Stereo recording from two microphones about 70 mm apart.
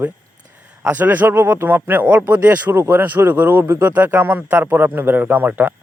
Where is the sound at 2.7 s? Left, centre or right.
Right.